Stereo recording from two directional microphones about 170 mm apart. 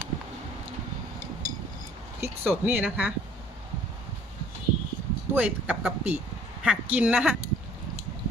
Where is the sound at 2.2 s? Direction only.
10° right (ahead or behind).